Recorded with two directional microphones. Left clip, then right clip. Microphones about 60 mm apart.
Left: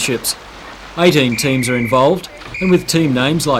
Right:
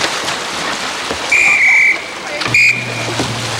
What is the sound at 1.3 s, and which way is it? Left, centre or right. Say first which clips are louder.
Speech: right 9 dB; right.